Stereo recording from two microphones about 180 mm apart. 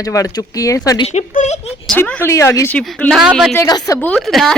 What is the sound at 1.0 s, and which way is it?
Speech, 40° left (ahead or behind).